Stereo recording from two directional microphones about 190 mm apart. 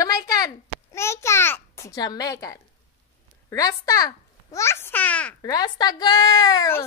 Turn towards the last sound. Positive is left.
turn(degrees=15)  # may be behind; listen again after turning